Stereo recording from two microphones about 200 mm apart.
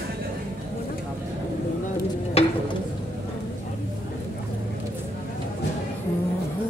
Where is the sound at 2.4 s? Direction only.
30° left (ahead or behind).